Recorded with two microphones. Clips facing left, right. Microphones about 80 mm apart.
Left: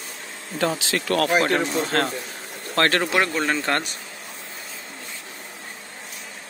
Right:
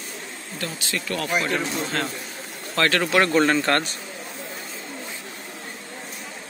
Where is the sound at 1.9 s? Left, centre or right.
Left.